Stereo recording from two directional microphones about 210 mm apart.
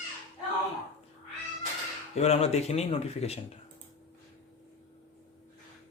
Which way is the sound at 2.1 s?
30° left (ahead or behind).